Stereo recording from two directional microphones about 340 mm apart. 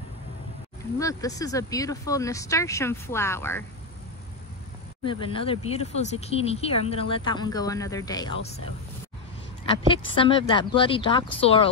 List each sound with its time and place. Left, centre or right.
0.9 s speech: centre
5.0 s speech: centre
9.7 s speech: centre